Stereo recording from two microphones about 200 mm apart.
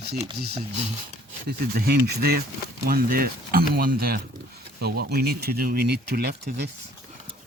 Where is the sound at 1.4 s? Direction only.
50° right (ahead or behind).